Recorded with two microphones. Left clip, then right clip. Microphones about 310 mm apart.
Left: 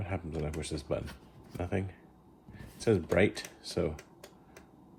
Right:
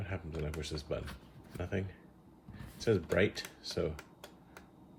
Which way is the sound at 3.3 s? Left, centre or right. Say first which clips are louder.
Left 2 dB; centre.